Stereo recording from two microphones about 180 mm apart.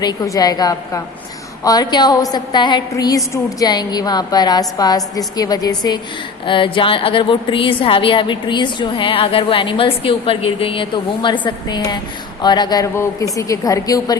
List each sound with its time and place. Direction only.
0.0 s a woman's voice: 20° left (ahead or behind)